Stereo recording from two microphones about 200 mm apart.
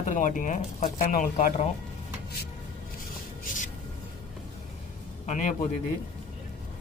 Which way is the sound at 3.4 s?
40° left (ahead or behind).